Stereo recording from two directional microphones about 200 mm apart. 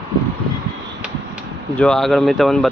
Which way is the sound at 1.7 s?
5° left (ahead or behind).